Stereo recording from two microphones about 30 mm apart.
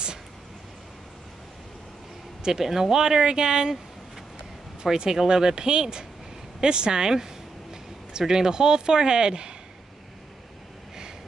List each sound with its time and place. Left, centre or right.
2.4 s speech: centre
4.9 s speech: right